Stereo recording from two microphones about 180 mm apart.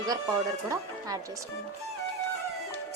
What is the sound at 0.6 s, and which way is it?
Speech, 20° right (ahead or behind).